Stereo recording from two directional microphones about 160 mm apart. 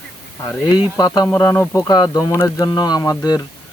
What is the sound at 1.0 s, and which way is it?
Speech, 20° left (ahead or behind).